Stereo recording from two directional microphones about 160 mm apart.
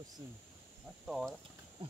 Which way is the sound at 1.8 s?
35° right (ahead or behind).